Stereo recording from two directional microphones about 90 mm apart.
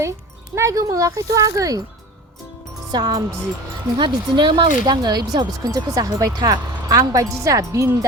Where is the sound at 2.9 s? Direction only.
45° right (ahead or behind).